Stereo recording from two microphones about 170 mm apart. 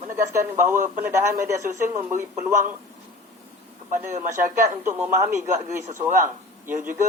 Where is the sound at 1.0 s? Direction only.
15° right (ahead or behind).